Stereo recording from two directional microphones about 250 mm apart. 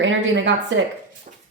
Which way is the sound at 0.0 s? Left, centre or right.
Right.